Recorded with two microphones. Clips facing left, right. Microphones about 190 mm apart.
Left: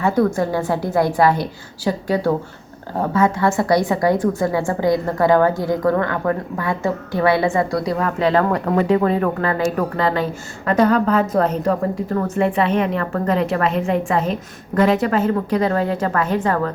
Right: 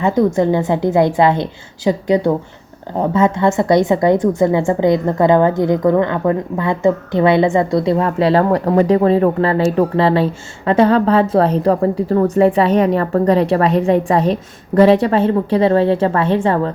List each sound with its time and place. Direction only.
0.0 s a woman's voice: 20° right (ahead or behind)